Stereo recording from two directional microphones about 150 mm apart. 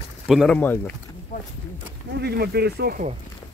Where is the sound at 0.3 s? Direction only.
Centre (ahead or behind).